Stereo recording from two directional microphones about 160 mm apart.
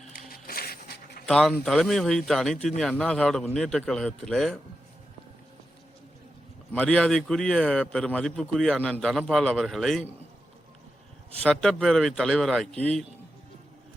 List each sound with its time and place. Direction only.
0.1 s a sound: 65° left (ahead or behind)
1.3 s a man's voice: 5° left (ahead or behind)
6.7 s a man's voice: 5° left (ahead or behind)
11.4 s a man's voice: centre (ahead or behind)